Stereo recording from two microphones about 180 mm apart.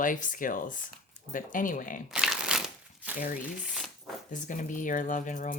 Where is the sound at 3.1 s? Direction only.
50° left (ahead or behind).